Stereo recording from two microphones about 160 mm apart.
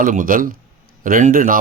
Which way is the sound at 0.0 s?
60° right (ahead or behind).